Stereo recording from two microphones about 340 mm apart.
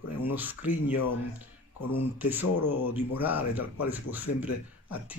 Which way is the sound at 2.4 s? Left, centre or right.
Left.